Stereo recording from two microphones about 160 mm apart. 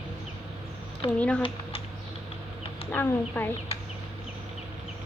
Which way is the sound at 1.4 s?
30° left (ahead or behind).